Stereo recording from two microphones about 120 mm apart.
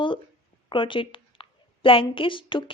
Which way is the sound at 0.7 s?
45° left (ahead or behind).